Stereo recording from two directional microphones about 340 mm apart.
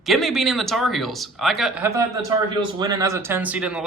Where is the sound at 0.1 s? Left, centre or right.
Centre.